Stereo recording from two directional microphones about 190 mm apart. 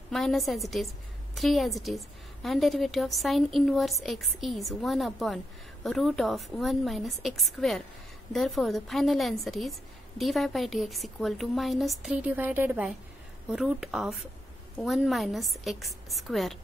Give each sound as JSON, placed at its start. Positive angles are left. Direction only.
{"t": 0.1, "sound": "a woman's voice", "side_deg": 0}